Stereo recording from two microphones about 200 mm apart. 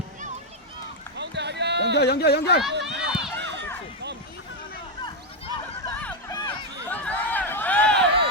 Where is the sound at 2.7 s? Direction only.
60° right (ahead or behind).